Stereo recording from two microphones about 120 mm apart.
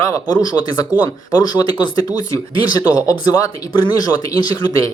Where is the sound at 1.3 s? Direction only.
35° left (ahead or behind).